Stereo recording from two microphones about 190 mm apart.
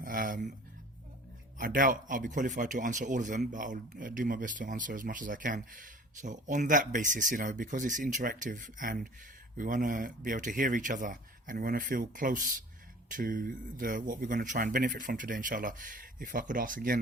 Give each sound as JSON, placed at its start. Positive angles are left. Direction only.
{"t": 0.0, "sound": "speech", "side_deg": -45}
{"t": 1.5, "sound": "speech", "side_deg": -45}